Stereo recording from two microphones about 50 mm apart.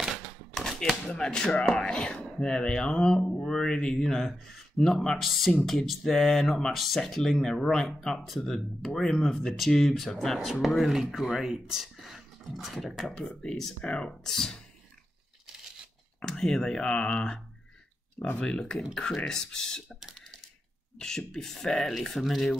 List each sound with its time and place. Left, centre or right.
0.6 s speech: centre
13.7 s speech: left
16.2 s speech: centre
21.0 s speech: centre